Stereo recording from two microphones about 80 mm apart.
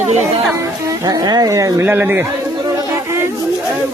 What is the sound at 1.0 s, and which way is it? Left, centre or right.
Speech, right.